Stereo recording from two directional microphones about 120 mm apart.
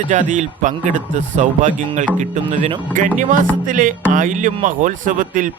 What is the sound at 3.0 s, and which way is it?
Speech, 90° right.